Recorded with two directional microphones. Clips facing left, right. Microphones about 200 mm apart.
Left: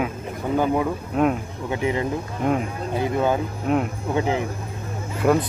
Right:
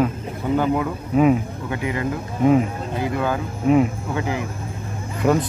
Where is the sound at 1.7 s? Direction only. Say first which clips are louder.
Left 2 dB; 25° left (ahead or behind).